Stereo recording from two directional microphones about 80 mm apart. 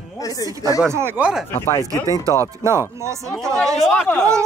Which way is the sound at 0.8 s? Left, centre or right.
Right.